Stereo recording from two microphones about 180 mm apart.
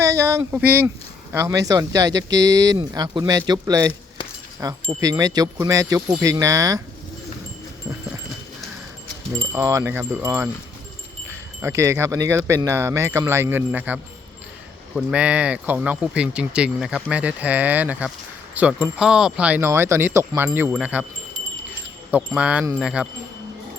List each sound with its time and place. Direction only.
0.0 s speech: 15° right (ahead or behind)
9.6 s speech: 15° right (ahead or behind)
22.1 s speech: 5° right (ahead or behind)